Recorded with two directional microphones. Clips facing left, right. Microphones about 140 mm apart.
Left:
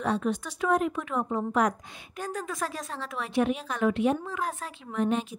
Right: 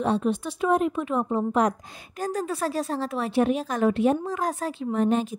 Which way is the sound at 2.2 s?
35° right (ahead or behind).